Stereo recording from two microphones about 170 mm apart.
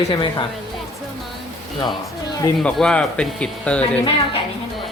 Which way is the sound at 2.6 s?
Centre (ahead or behind).